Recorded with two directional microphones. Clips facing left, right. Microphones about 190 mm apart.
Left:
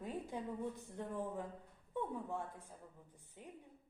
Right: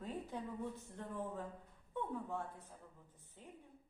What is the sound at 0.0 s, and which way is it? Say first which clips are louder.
A woman's voice: left 1 dB; 15° left (ahead or behind).